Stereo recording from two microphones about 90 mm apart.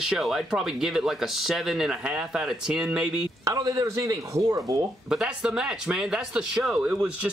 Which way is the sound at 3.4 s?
40° right (ahead or behind).